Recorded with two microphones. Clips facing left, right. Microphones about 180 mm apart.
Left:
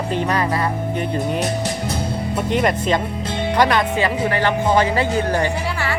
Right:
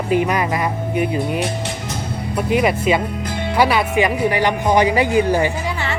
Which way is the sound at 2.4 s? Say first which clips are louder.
Right 3 dB; 5° right (ahead or behind).